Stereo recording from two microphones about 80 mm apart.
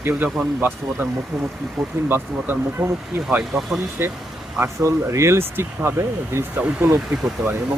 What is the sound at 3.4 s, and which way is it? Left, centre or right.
Speech, centre.